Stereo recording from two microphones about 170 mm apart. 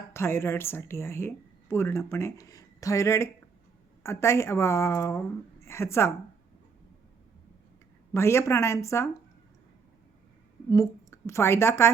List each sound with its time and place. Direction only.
0.1 s speech: 15° left (ahead or behind)
8.1 s speech: 15° left (ahead or behind)
10.7 s a woman's voice: 20° left (ahead or behind)